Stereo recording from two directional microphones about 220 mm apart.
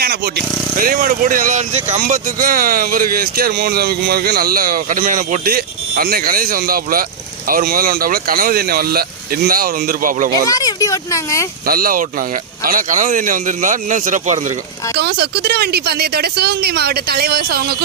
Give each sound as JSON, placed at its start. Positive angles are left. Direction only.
{"t": 0.0, "sound": "speech", "side_deg": -45}
{"t": 10.5, "sound": "speech", "side_deg": 15}
{"t": 11.6, "sound": "speech", "side_deg": -40}
{"t": 14.9, "sound": "speech", "side_deg": -50}